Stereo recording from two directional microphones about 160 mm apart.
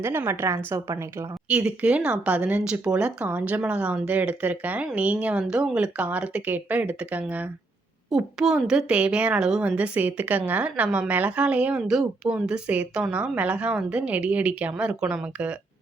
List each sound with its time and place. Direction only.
0.0 s a woman's voice: 15° right (ahead or behind)